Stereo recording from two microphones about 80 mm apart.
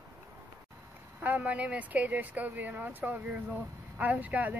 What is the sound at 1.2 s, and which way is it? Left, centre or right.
Speech, centre.